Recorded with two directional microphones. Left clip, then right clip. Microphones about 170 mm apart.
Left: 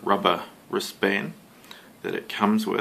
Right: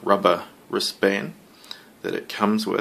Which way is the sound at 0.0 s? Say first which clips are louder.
Right 3 dB; 30° right (ahead or behind).